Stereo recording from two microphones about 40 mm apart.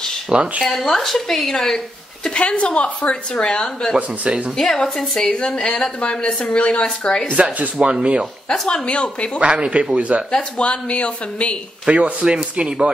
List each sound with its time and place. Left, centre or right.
0.3 s speech: right
0.7 s a woman's voice: centre
2.2 s a woman's voice: left
7.1 s speech: centre
7.5 s speech: right
7.9 s speech: right
8.5 s speech: left
9.4 s speech: right
10.6 s speech: left
11.9 s speech: right